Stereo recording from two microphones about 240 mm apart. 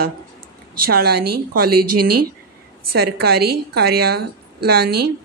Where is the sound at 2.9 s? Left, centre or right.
Right.